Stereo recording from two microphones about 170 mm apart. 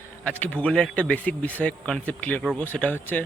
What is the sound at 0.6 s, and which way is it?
Speech, 5° left (ahead or behind).